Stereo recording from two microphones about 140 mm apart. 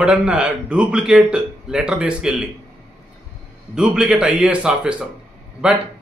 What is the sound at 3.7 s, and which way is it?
A man's voice, 5° right (ahead or behind).